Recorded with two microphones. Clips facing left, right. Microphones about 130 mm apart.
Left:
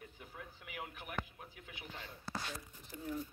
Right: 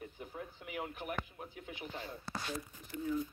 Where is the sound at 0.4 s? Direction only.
30° right (ahead or behind).